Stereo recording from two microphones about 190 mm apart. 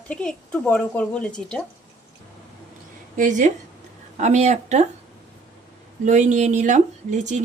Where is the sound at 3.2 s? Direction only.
40° right (ahead or behind).